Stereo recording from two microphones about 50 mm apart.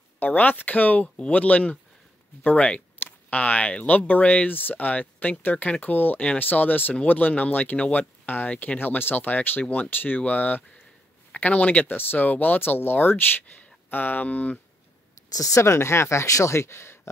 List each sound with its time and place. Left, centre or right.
0.2 s speech: left
15.5 s speech: left